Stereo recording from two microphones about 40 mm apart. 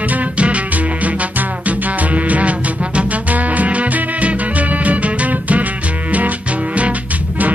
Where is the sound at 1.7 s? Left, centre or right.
Right.